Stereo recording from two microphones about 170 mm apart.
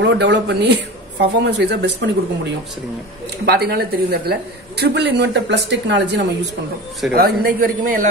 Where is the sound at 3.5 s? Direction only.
70° right (ahead or behind).